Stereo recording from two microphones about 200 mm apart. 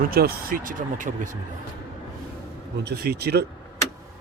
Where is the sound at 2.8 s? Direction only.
55° right (ahead or behind).